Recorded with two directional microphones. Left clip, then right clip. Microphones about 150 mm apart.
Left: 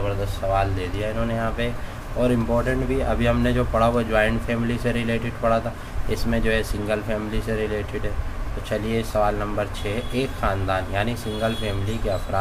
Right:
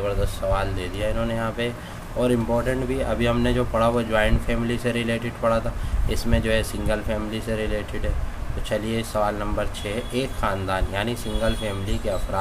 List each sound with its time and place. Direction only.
0.6 s speech: 25° right (ahead or behind)